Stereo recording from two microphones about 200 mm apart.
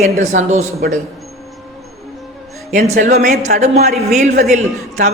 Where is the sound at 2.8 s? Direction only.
35° right (ahead or behind).